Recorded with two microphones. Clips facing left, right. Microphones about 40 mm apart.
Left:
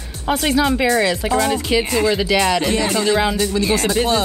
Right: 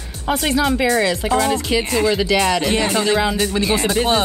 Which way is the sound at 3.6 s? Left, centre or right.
Centre.